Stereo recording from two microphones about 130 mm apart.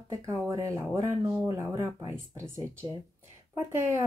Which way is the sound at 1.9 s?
25° right (ahead or behind).